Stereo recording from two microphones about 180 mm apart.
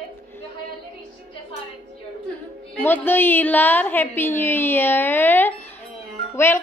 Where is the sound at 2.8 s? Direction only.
10° left (ahead or behind).